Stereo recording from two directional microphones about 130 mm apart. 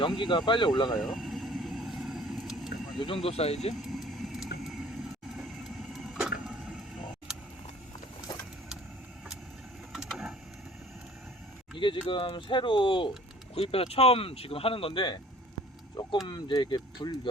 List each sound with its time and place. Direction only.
0.2 s speech: 35° left (ahead or behind)
0.9 s vehicle: centre (ahead or behind)
3.0 s speech: 45° left (ahead or behind)
3.8 s vehicle: centre (ahead or behind)
7.3 s camera: 5° right (ahead or behind)
9.9 s a sound: 5° right (ahead or behind)
12.0 s speech: 40° left (ahead or behind)
16.2 s speech: 35° left (ahead or behind)